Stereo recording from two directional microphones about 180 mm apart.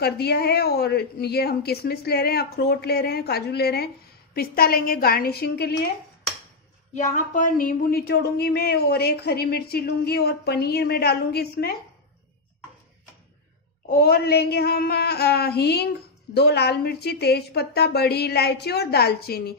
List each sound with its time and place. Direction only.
0.0 s a woman's voice: 60° left (ahead or behind)
6.9 s a woman's voice: 45° left (ahead or behind); by 11.7 s 60° left (ahead or behind)
13.8 s a woman's voice: 55° left (ahead or behind)